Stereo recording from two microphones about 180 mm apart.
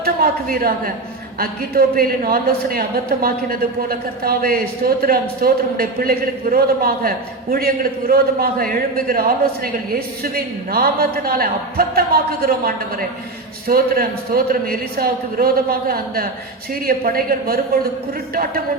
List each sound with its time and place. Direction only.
0.0 s a woman's voice: 55° right (ahead or behind)